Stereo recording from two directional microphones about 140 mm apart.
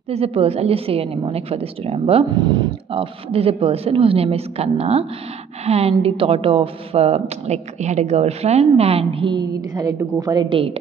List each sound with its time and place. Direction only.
0.1 s a woman's voice: 45° right (ahead or behind)
2.3 s a woman's voice: 30° right (ahead or behind)